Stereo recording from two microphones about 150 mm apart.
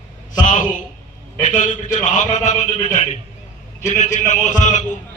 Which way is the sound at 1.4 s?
55° left (ahead or behind).